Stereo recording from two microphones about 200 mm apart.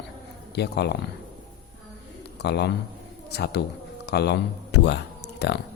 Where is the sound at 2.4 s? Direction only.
55° left (ahead or behind).